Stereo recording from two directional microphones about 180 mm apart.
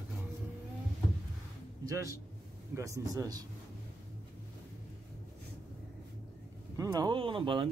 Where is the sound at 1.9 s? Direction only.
20° right (ahead or behind).